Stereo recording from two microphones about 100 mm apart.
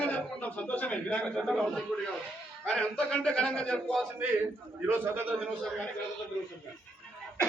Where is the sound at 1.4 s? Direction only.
Centre (ahead or behind).